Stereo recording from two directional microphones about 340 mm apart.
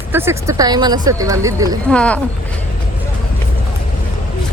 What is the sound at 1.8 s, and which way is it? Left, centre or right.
Speech, centre.